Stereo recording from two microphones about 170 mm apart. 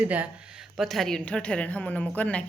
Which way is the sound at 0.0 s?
10° right (ahead or behind).